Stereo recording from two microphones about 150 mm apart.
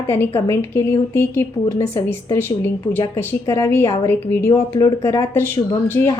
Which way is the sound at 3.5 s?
15° left (ahead or behind).